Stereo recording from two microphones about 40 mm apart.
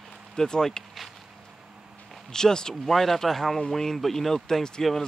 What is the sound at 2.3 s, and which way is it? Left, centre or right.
Speech, centre.